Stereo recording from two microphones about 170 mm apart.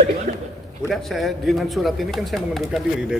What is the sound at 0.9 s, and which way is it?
Speech, centre (ahead or behind).